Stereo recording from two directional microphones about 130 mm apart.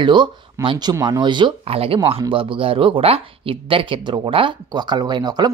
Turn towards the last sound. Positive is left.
turn(degrees=-30)  # may be behind; listen again after turning